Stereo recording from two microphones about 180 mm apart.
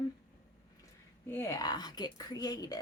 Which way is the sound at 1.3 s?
15° left (ahead or behind).